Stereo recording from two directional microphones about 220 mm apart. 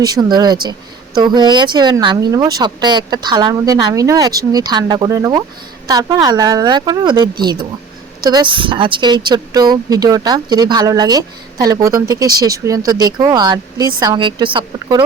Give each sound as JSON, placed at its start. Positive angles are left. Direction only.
{"t": 0.0, "sound": "a woman's voice", "side_deg": -15}